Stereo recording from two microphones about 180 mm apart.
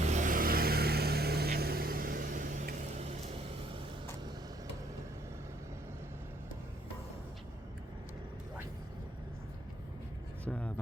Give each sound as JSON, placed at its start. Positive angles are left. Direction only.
{"t": 0.0, "sound": "vehicle", "side_deg": -40}
{"t": 10.4, "sound": "vehicle", "side_deg": 5}